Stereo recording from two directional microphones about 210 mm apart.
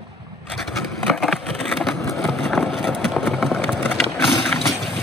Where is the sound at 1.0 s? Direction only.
Centre (ahead or behind).